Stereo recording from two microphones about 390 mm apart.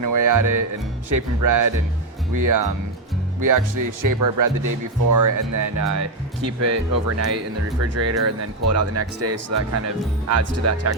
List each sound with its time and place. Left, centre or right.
0.0 s speech: right